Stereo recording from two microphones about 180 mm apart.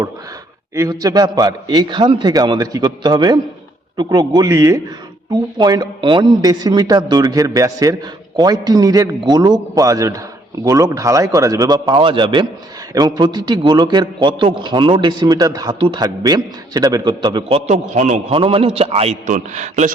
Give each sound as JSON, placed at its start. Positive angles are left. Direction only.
{"t": 0.8, "sound": "a man's voice", "side_deg": -20}
{"t": 17.7, "sound": "a man's voice", "side_deg": -40}